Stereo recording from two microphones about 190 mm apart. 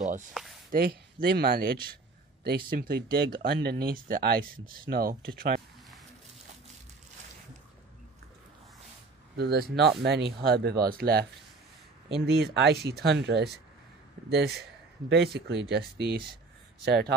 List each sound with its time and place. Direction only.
0.3 s speech: 5° right (ahead or behind)
0.7 s speech: 50° right (ahead or behind)
9.4 s speech: 55° right (ahead or behind)
12.3 s speech: 60° right (ahead or behind)
15.0 s speech: 60° right (ahead or behind)